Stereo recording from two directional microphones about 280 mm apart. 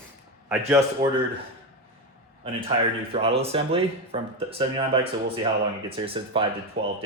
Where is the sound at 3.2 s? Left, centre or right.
Centre.